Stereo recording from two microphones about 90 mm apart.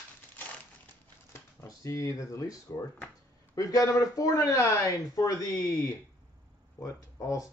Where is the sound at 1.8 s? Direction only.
35° left (ahead or behind).